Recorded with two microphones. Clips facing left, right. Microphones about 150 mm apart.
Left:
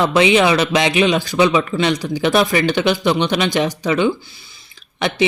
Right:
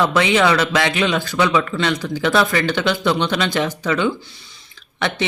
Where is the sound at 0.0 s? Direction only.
20° left (ahead or behind).